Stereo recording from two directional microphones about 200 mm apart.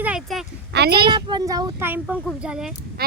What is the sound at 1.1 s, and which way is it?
Speech, 20° right (ahead or behind).